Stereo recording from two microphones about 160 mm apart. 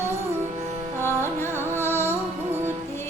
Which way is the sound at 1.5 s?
15° right (ahead or behind).